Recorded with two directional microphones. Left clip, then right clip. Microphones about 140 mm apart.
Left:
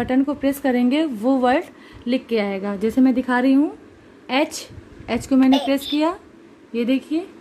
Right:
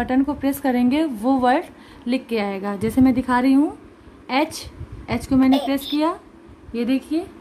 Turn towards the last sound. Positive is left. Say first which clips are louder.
# left 1 dB
turn(degrees=20)  # may be behind; listen again after turning